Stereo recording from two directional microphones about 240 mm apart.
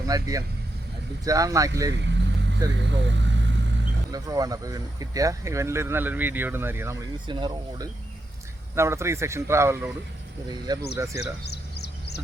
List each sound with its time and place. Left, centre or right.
0.1 s speech: centre
1.9 s vehicle: right
4.1 s speech: centre
10.9 s speech: centre
11.2 s a sound: left